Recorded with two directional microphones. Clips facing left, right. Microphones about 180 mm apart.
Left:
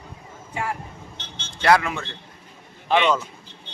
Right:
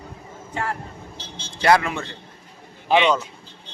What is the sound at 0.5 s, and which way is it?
Speech, 10° left (ahead or behind).